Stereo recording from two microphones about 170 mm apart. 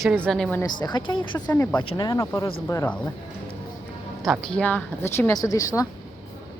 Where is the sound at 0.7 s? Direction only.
25° left (ahead or behind).